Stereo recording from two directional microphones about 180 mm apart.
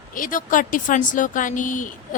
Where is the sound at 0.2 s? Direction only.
50° left (ahead or behind).